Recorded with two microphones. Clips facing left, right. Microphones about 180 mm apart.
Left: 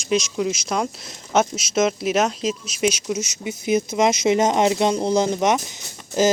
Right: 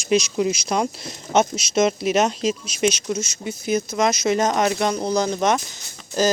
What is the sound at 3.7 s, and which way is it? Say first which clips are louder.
Speech: left 2 dB; 20° left (ahead or behind).